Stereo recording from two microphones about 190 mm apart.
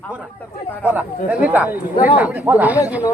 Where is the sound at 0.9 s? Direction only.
10° right (ahead or behind).